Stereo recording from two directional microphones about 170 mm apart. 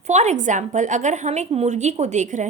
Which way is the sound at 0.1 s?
40° right (ahead or behind).